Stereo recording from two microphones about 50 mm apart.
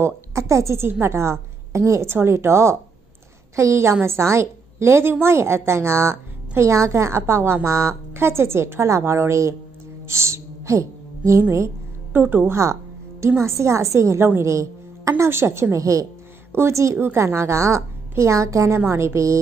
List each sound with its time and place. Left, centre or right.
0.0 s a woman's voice: right
0.8 s a woman's voice: right
1.1 s a woman's voice: right
7.6 s a woman's voice: right
8.1 s a woman's voice: right
12.1 s a woman's voice: right
13.4 s a woman's voice: right
14.4 s a woman's voice: right
15.2 s a woman's voice: right
15.7 s a woman's voice: right
16.5 s a woman's voice: right
17.0 s a woman's voice: right
18.9 s a woman's voice: right